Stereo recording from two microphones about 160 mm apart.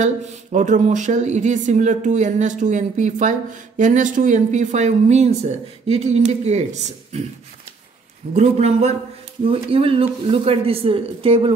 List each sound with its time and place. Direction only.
0.0 s speech: 50° right (ahead or behind)
8.3 s speech: 40° right (ahead or behind)